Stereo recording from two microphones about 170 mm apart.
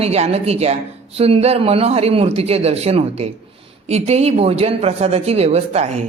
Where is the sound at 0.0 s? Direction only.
40° right (ahead or behind).